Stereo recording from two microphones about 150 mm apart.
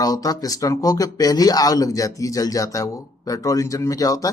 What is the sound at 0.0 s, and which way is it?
Speech, 25° left (ahead or behind).